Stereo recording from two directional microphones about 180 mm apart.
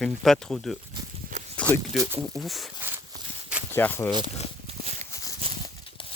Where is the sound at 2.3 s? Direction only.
Centre (ahead or behind).